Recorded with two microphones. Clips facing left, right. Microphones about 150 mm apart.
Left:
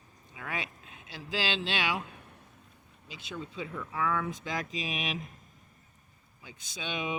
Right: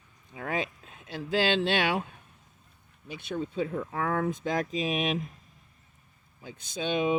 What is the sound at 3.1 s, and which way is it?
Speech, 55° right (ahead or behind).